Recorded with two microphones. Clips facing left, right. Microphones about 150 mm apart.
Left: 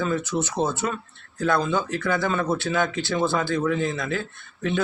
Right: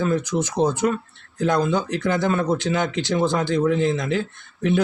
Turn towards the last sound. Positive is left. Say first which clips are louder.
# right 5 dB
turn(degrees=-15)  # may be behind; listen again after turning